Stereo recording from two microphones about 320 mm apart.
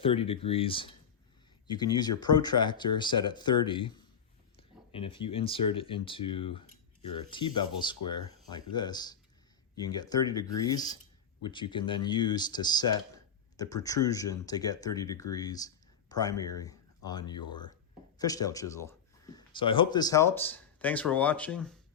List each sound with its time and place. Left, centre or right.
0.0 s speech: centre